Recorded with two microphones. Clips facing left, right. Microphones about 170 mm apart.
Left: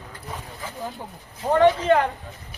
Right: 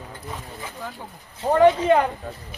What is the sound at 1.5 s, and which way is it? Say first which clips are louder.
Speech: right 1 dB; 10° right (ahead or behind).